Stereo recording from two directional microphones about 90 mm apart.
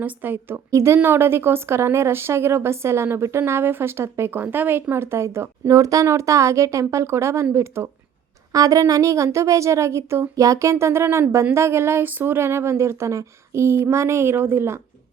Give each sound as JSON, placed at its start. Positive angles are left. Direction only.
{"t": 0.0, "sound": "speech", "side_deg": -20}
{"t": 0.7, "sound": "a woman's voice", "side_deg": -35}
{"t": 0.9, "sound": "a woman's voice", "side_deg": -25}
{"t": 8.5, "sound": "a woman's voice", "side_deg": -40}